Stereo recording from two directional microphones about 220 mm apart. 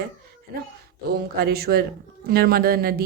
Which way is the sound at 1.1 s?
45° right (ahead or behind).